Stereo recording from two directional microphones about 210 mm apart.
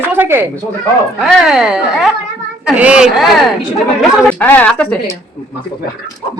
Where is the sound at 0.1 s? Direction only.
10° right (ahead or behind).